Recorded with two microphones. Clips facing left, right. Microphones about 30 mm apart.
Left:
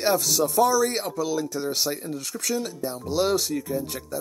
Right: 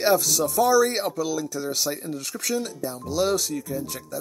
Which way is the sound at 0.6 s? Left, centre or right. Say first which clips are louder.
Right 5 dB; centre.